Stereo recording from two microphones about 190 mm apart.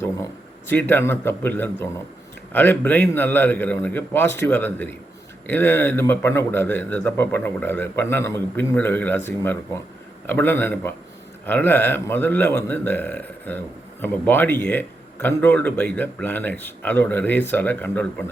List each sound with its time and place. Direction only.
0.7 s speech: 10° left (ahead or behind)